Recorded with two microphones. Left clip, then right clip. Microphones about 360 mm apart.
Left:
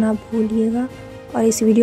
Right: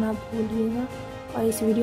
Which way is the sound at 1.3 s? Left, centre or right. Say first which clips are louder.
Left 8 dB; centre.